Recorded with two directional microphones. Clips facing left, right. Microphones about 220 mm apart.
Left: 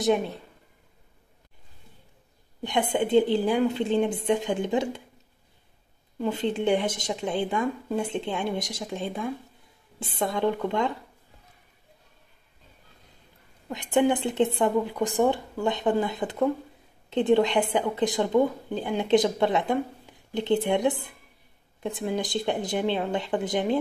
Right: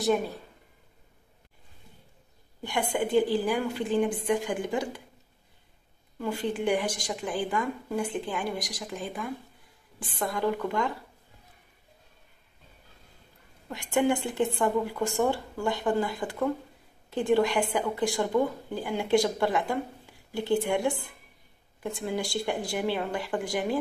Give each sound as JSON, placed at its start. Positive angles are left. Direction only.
{"t": 0.0, "sound": "a woman's voice", "side_deg": 20}
{"t": 2.6, "sound": "a woman's voice", "side_deg": 20}
{"t": 6.1, "sound": "a woman's voice", "side_deg": 20}
{"t": 13.7, "sound": "a woman's voice", "side_deg": 20}